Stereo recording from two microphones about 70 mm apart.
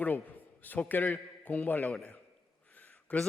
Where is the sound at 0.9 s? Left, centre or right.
Left.